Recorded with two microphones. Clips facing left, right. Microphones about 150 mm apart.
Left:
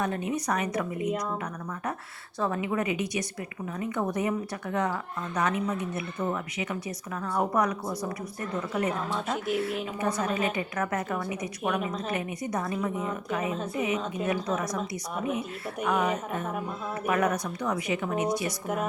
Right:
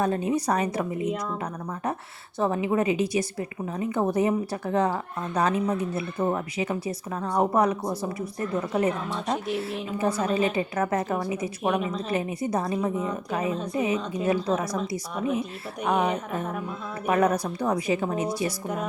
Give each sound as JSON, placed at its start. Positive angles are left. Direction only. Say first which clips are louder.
{"t": 0.0, "sound": "a woman's voice", "louder": "right 5 dB", "side_deg": -30}
{"t": 2.4, "sound": "a woman's voice", "louder": "right 4 dB", "side_deg": -25}
{"t": 17.1, "sound": "a woman's voice", "louder": "right 4 dB", "side_deg": -30}